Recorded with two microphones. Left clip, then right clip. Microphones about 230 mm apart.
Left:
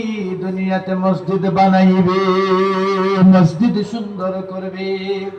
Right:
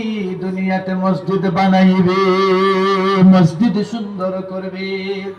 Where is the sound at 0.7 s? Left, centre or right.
Right.